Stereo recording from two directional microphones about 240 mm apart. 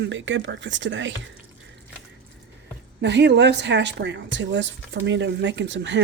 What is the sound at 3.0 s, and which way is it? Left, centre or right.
Speech, right.